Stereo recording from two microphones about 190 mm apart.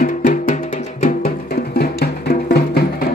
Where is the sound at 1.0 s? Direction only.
55° left (ahead or behind).